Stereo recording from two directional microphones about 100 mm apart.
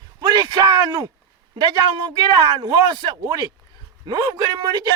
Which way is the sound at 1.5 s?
55° right (ahead or behind).